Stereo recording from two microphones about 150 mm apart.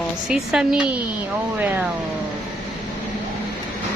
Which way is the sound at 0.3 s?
5° right (ahead or behind).